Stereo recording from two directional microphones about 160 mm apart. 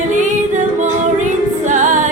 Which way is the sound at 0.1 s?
50° right (ahead or behind).